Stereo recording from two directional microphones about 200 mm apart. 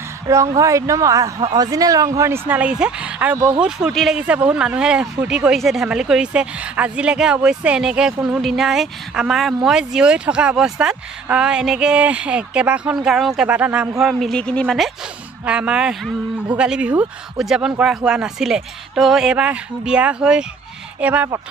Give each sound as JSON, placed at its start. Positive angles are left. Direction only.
{"t": 0.6, "sound": "speech", "side_deg": -15}